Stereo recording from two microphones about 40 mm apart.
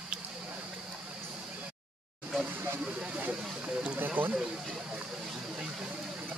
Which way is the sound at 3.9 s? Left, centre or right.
Right.